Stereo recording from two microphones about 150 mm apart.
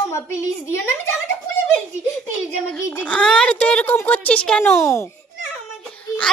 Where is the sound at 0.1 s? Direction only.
15° left (ahead or behind).